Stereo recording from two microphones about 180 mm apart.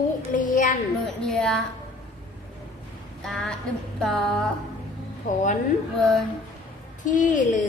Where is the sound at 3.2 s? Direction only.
Centre (ahead or behind).